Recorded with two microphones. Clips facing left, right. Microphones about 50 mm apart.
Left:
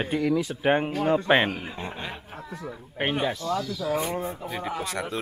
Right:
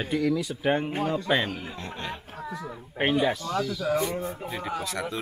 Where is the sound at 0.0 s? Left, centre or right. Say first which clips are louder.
Left 1 dB; centre.